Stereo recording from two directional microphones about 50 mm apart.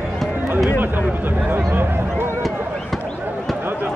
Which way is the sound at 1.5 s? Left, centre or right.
Right.